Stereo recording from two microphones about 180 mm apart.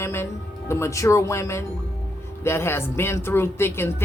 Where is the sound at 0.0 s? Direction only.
15° left (ahead or behind).